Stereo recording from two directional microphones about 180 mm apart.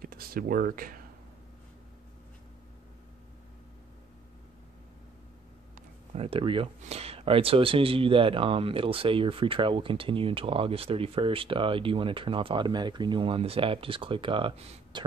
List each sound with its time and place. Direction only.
0.0 s speech: 55° right (ahead or behind)
6.1 s speech: 30° right (ahead or behind)